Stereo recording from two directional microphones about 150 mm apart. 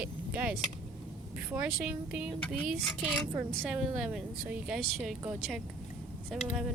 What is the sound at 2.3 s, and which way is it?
Speech, 10° left (ahead or behind).